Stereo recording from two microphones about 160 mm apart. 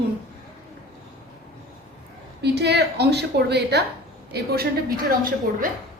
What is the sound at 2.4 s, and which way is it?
A woman's voice, 90° right.